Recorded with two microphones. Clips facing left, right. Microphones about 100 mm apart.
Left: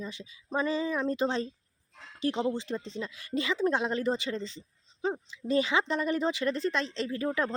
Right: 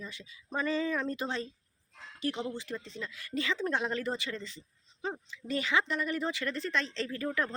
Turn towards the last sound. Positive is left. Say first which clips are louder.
# left 3 dB
turn(degrees=20)  # may be behind; listen again after turning